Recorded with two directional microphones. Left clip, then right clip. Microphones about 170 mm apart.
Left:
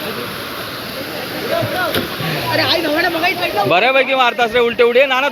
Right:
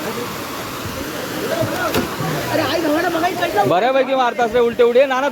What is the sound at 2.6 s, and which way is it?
Speech, 10° right (ahead or behind).